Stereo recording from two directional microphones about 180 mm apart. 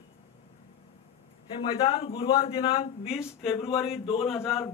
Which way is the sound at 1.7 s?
30° left (ahead or behind).